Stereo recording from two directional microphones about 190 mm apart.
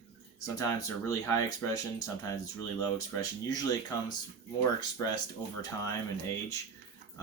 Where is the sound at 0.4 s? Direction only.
15° left (ahead or behind).